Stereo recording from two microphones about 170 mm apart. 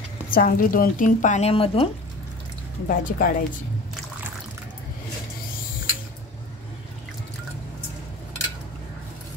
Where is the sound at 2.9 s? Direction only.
55° left (ahead or behind).